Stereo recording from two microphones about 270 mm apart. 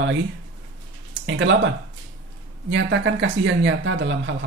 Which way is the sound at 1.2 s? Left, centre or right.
Right.